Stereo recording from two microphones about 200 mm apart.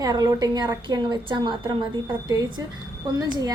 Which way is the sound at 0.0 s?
20° right (ahead or behind).